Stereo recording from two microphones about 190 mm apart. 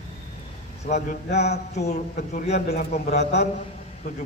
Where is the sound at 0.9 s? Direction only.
35° left (ahead or behind).